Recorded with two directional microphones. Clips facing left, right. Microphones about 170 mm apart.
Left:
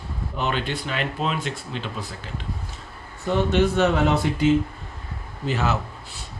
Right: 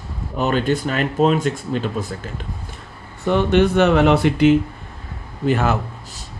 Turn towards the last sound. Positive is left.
turn(degrees=-50)  # may be behind; listen again after turning